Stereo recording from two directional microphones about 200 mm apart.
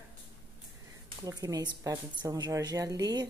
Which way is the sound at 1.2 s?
20° right (ahead or behind).